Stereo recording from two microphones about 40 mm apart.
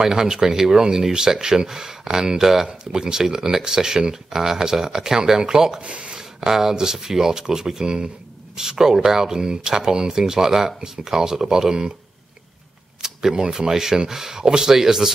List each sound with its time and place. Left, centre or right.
0.0 s speech: centre
5.8 s speech: right
6.1 s speech: centre
13.0 s a sound: centre
13.4 s speech: centre